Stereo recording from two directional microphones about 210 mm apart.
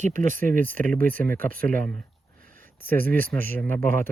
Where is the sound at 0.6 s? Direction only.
10° left (ahead or behind).